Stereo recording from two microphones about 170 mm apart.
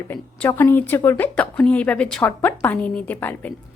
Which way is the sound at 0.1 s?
15° left (ahead or behind).